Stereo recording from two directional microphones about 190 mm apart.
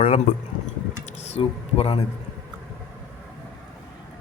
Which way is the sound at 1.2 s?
30° left (ahead or behind).